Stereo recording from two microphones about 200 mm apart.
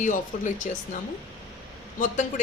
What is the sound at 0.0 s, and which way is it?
Speech, 40° left (ahead or behind).